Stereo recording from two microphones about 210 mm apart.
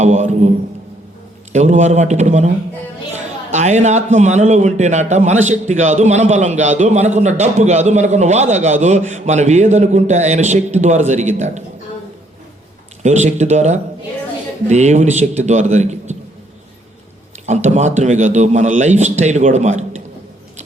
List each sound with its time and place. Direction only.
0.0 s a man's voice: 35° right (ahead or behind)
1.5 s a man's voice: 35° right (ahead or behind)
3.5 s a man's voice: 35° right (ahead or behind)
13.0 s a man's voice: 35° right (ahead or behind)
17.4 s a man's voice: 35° right (ahead or behind)